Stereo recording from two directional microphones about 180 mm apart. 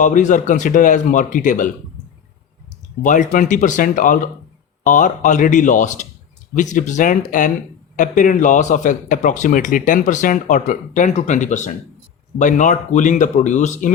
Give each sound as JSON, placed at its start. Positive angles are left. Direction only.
{"t": 0.0, "sound": "speech", "side_deg": 45}
{"t": 3.0, "sound": "speech", "side_deg": 45}